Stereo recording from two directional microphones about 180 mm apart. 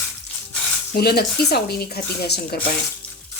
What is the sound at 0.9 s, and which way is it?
Speech, 60° left (ahead or behind).